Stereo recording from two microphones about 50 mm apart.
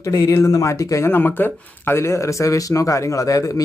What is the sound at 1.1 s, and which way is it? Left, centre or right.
Speech, left.